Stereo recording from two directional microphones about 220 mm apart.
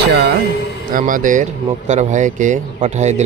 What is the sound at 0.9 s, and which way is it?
Speech, 40° right (ahead or behind).